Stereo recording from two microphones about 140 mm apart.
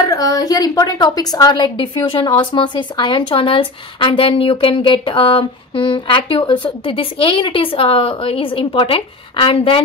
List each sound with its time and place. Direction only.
0.0 s a woman's voice: 25° left (ahead or behind)